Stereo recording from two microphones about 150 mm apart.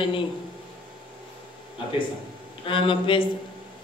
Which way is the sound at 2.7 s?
35° left (ahead or behind).